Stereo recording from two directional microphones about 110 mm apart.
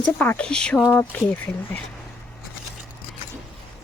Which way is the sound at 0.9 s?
20° left (ahead or behind).